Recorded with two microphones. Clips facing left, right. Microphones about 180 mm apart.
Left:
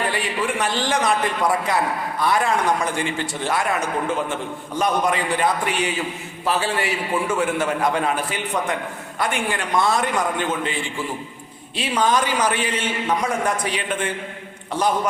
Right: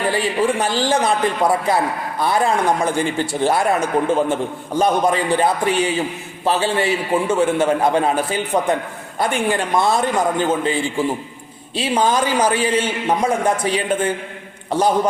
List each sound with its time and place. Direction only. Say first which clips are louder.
0.1 s a man's voice: right 6 dB; 30° right (ahead or behind)
11.8 s a man's voice: right 3 dB; 30° right (ahead or behind)